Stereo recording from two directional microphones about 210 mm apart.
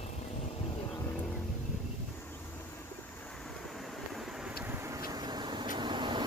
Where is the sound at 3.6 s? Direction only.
Centre (ahead or behind); by 6.2 s 20° right (ahead or behind).